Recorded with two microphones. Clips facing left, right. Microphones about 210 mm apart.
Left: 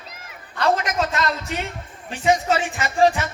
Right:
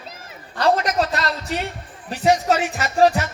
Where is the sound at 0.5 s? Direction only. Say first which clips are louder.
Right 2 dB; 35° right (ahead or behind).